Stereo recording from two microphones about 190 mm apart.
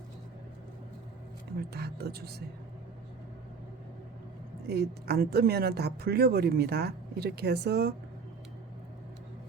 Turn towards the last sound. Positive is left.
turn(degrees=-60)  # may be behind; listen again after turning